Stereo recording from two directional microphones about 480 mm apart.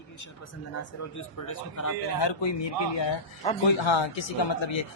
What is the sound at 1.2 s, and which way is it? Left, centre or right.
Speech, left.